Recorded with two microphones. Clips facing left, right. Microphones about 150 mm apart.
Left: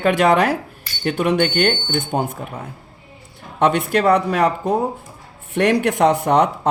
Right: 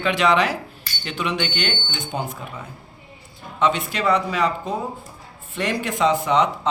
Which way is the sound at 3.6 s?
60° left (ahead or behind).